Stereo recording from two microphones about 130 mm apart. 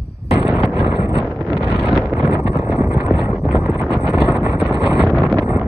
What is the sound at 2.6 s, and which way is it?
Wind noise, 20° right (ahead or behind).